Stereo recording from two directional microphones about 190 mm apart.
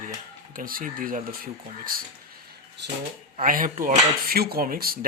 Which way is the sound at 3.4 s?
45° right (ahead or behind).